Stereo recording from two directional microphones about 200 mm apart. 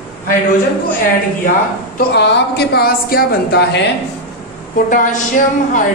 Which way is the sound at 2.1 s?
55° left (ahead or behind).